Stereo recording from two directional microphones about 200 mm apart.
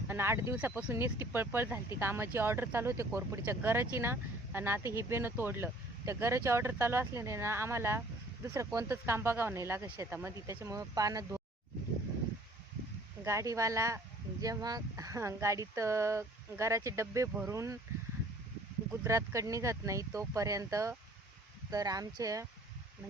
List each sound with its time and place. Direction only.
0.1 s speech: 10° right (ahead or behind)
13.2 s speech: 15° right (ahead or behind)
19.0 s speech: 15° right (ahead or behind)